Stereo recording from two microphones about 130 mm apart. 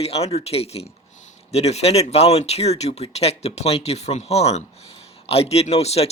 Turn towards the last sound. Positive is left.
turn(degrees=55)  # may be behind; listen again after turning